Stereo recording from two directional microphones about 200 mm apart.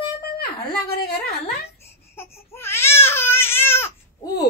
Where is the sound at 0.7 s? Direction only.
50° left (ahead or behind).